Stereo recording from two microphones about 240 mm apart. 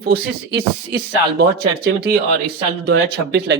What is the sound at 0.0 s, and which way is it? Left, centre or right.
Speech, right.